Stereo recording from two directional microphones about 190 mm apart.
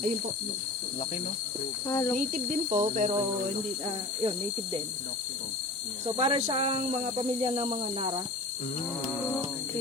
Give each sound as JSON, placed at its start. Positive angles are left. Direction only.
{"t": 1.9, "sound": "speech", "side_deg": 15}
{"t": 2.1, "sound": "speech", "side_deg": -40}
{"t": 4.2, "sound": "speech", "side_deg": -25}
{"t": 6.1, "sound": "speech", "side_deg": -30}